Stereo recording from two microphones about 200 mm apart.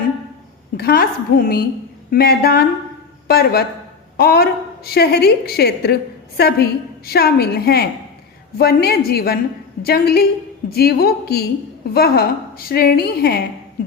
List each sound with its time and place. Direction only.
0.8 s a woman's voice: 50° left (ahead or behind)